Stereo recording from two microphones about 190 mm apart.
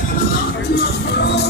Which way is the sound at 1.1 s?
60° left (ahead or behind).